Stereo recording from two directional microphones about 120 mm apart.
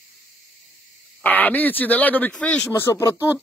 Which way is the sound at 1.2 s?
15° left (ahead or behind).